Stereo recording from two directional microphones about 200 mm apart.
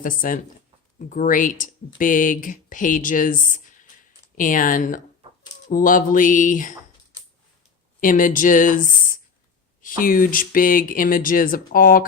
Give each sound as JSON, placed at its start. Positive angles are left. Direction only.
{"t": 0.0, "sound": "speech", "side_deg": 45}
{"t": 8.0, "sound": "speech", "side_deg": 40}